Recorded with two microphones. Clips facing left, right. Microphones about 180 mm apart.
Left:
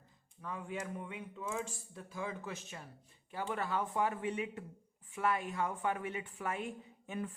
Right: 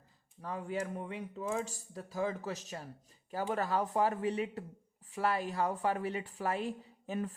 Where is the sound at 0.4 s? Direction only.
35° right (ahead or behind).